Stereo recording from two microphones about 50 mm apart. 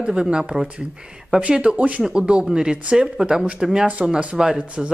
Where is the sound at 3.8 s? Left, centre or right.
Right.